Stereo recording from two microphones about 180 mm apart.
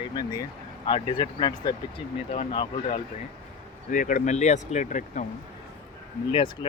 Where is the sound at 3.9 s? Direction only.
45° left (ahead or behind).